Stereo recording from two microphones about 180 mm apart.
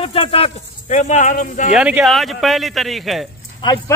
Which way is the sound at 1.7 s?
5° right (ahead or behind).